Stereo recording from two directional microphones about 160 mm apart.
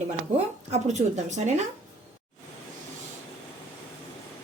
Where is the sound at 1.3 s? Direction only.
45° right (ahead or behind).